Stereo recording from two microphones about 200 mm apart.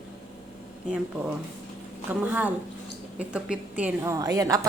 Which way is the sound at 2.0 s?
10° right (ahead or behind).